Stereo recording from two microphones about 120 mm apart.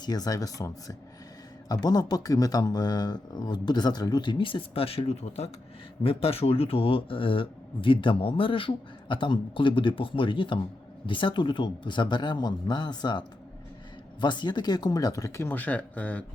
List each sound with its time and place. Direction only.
0.0 s speech: 35° left (ahead or behind); by 16.2 s 10° left (ahead or behind)